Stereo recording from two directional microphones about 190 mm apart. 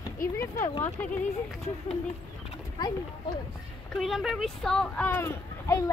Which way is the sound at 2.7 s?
20° left (ahead or behind).